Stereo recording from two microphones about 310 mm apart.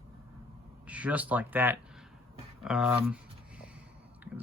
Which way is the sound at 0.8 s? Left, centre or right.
Centre.